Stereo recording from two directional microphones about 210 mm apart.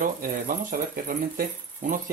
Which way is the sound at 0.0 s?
40° right (ahead or behind).